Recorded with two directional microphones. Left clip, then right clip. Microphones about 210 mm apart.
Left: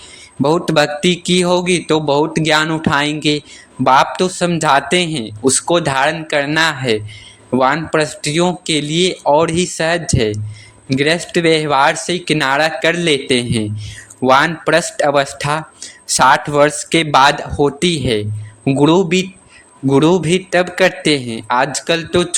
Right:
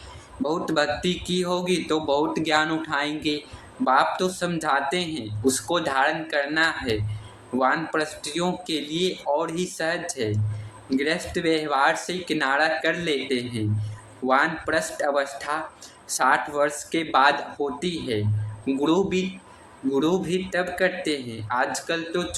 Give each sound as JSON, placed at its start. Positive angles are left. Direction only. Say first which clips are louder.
{"t": 0.4, "sound": "a man's voice", "louder": "left 10 dB", "side_deg": 45}